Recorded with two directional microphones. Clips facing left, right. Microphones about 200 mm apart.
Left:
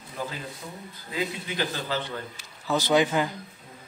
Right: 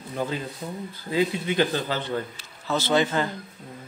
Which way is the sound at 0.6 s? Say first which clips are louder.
Right 6 dB; 30° right (ahead or behind).